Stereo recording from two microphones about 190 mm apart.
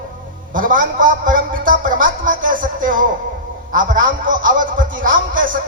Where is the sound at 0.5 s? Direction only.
45° right (ahead or behind).